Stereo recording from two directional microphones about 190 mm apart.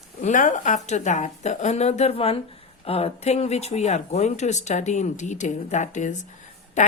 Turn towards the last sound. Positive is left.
turn(degrees=40)  # may be behind; listen again after turning